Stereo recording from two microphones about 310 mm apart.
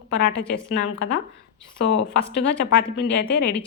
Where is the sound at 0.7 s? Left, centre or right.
Left.